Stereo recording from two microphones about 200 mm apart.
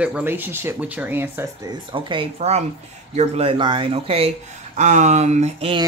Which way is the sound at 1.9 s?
25° right (ahead or behind).